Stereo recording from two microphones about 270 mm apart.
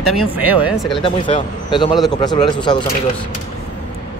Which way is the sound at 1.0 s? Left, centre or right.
Centre.